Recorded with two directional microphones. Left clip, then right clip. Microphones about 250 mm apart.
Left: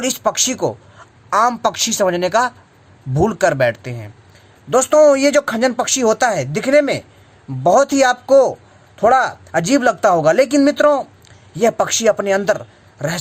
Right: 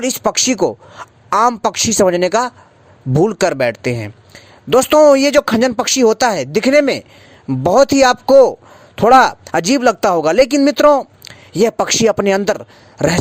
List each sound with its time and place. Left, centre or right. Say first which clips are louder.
0.0 s speech: right 2 dB; right